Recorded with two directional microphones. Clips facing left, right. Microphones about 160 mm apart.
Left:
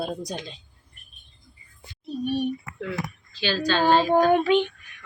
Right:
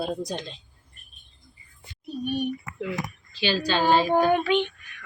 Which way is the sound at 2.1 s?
30° left (ahead or behind).